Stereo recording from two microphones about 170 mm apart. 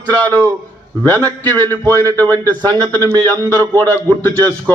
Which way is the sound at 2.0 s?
20° right (ahead or behind).